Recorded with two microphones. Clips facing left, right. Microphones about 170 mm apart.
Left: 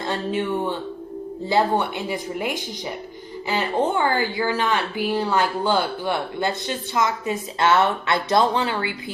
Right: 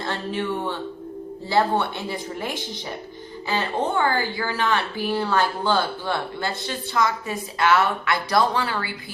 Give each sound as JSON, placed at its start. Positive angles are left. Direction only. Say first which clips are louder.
{"t": 0.0, "sound": "speech", "louder": "left 3 dB", "side_deg": 15}
{"t": 3.5, "sound": "a woman's voice", "louder": "left 2 dB", "side_deg": 15}